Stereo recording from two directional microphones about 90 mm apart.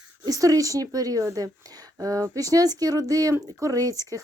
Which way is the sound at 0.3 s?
40° right (ahead or behind).